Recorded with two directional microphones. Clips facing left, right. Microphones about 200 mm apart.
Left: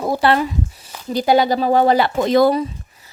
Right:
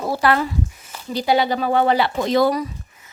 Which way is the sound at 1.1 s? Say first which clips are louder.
Left 4 dB; 45° left (ahead or behind).